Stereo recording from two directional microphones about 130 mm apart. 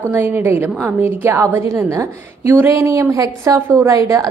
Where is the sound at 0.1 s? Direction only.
15° right (ahead or behind).